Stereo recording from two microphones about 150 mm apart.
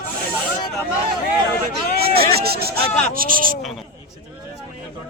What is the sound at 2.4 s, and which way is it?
Speech, 90° right.